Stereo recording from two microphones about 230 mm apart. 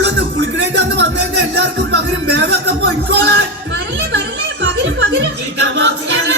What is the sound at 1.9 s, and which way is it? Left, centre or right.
Music, right.